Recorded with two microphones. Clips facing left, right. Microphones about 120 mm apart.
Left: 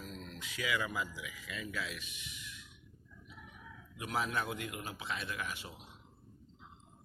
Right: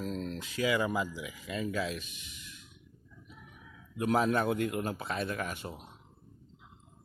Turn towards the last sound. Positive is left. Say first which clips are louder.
# right 5 dB
turn(degrees=-50)  # may be behind; listen again after turning